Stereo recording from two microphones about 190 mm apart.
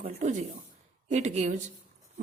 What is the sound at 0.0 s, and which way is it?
A woman's voice, 40° right (ahead or behind).